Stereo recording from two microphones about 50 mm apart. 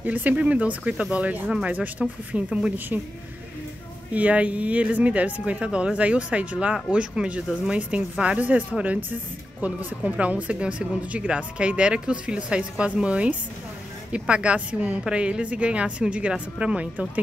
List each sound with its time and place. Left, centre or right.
0.0 s a woman's voice: right
4.1 s a woman's voice: right